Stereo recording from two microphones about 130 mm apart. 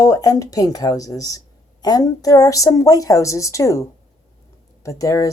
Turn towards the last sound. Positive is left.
turn(degrees=25)  # may be behind; listen again after turning